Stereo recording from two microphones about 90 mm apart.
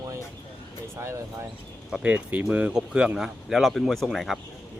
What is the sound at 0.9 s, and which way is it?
Speech, 30° right (ahead or behind).